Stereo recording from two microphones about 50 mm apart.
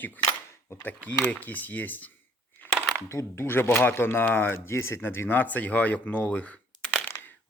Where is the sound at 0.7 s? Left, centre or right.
Left.